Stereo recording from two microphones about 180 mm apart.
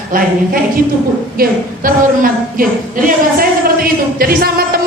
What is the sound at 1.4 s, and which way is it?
A woman's voice, 50° right (ahead or behind).